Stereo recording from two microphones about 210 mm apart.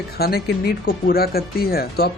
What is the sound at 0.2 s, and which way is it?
Speech, 50° left (ahead or behind).